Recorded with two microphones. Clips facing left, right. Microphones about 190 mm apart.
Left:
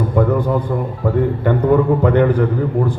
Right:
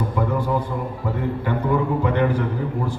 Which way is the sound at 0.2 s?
55° left (ahead or behind).